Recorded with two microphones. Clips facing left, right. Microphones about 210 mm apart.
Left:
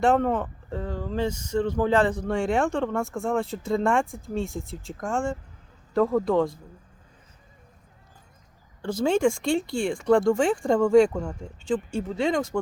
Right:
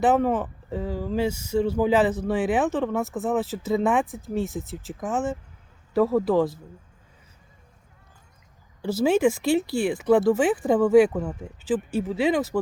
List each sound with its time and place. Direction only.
0.0 s speech: 5° right (ahead or behind)
8.8 s speech: 5° right (ahead or behind)